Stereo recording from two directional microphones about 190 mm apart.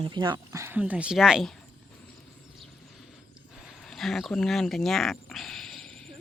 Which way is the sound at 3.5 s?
Centre (ahead or behind).